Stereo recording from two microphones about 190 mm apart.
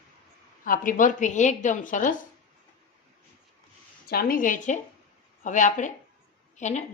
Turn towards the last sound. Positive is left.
turn(degrees=40)  # may be behind; listen again after turning